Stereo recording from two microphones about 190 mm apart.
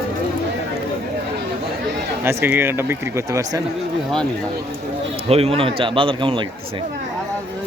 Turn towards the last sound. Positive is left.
turn(degrees=-25)  # may be behind; listen again after turning